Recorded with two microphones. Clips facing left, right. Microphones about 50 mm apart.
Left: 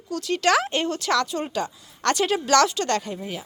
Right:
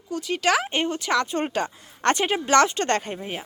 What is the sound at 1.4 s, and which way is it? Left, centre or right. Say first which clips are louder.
A woman's voice: right 2 dB; right.